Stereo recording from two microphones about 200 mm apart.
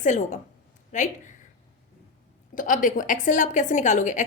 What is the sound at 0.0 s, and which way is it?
A woman's voice, 35° left (ahead or behind).